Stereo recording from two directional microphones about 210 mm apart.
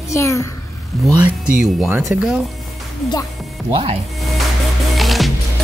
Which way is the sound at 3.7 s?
25° right (ahead or behind).